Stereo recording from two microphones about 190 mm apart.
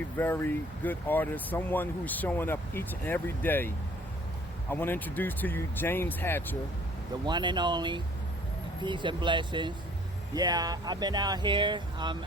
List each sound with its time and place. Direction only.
0.2 s speech: 10° left (ahead or behind)
4.7 s speech: 10° left (ahead or behind)
7.3 s speech: 25° right (ahead or behind)